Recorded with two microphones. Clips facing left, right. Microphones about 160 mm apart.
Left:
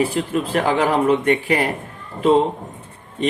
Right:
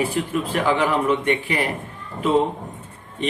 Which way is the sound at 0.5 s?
40° left (ahead or behind).